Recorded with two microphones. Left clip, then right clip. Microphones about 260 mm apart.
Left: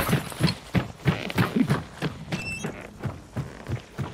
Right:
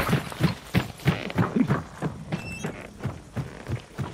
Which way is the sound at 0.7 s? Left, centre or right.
Right.